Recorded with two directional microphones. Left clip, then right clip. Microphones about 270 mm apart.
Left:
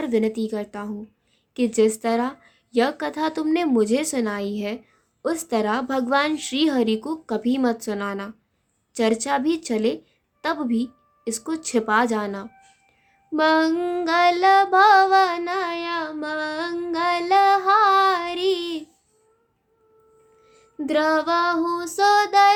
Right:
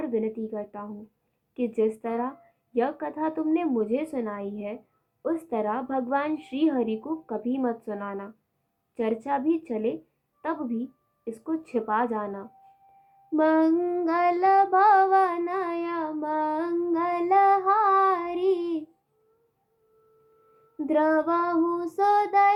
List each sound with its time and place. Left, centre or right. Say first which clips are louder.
0.0 s a woman's voice: left 6 dB; left
13.3 s female singing: left 3 dB; centre
20.7 s child singing: left 3 dB; left